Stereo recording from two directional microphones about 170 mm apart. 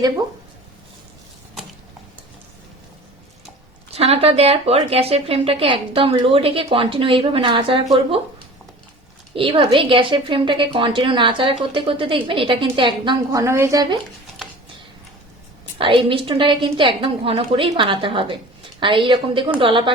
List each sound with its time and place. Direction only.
3.9 s speech: 35° right (ahead or behind)
9.3 s a woman's voice: 30° right (ahead or behind)
15.8 s a woman's voice: 30° right (ahead or behind)